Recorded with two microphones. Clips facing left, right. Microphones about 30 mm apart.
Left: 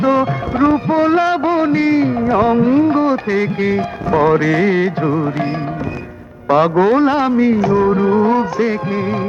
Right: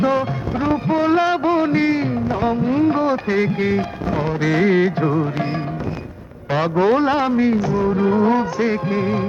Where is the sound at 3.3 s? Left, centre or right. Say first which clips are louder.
Left 2 dB; centre.